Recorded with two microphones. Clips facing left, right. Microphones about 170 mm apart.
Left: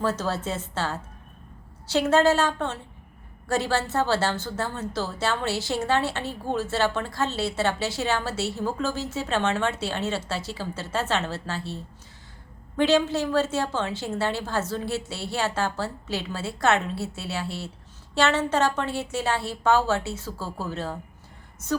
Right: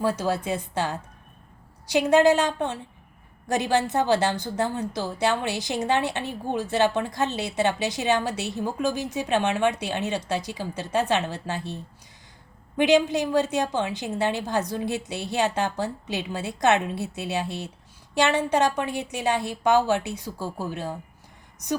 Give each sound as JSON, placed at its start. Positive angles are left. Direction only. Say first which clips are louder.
{"t": 0.0, "sound": "a woman's voice", "louder": "right 2 dB", "side_deg": -10}